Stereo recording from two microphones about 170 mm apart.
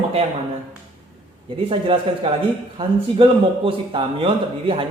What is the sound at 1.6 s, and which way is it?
A man's voice, 30° right (ahead or behind).